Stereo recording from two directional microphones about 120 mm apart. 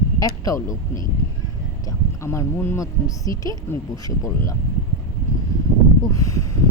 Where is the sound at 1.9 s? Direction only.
25° left (ahead or behind).